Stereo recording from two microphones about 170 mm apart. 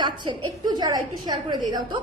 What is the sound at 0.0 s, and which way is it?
A woman's voice, 30° right (ahead or behind).